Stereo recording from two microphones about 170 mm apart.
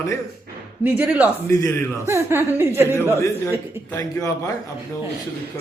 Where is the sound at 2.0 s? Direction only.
15° right (ahead or behind).